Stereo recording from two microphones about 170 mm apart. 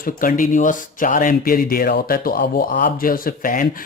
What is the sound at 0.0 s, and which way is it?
Speech, 55° left (ahead or behind).